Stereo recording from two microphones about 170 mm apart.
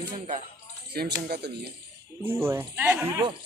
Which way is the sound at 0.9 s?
75° right (ahead or behind).